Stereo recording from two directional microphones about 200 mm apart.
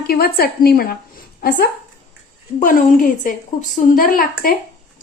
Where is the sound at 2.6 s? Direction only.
40° left (ahead or behind).